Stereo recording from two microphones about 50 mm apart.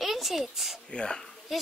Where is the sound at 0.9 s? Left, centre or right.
Centre.